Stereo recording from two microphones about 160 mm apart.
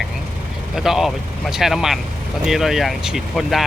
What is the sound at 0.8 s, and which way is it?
Speech, centre (ahead or behind).